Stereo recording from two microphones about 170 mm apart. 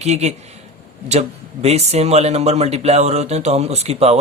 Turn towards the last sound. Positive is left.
turn(degrees=-35)  # may be behind; listen again after turning